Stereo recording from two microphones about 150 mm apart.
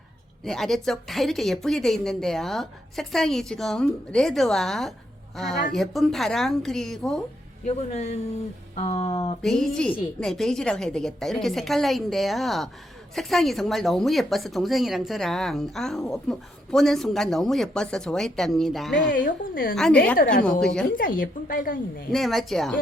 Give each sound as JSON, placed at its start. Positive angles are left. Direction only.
{"t": 0.4, "sound": "speech", "side_deg": 0}
{"t": 7.6, "sound": "speech", "side_deg": 50}
{"t": 9.4, "sound": "speech", "side_deg": 0}
{"t": 19.1, "sound": "a woman's voice", "side_deg": 70}
{"t": 19.7, "sound": "speech", "side_deg": 5}
{"t": 20.2, "sound": "a woman's voice", "side_deg": 75}
{"t": 22.1, "sound": "speech", "side_deg": 0}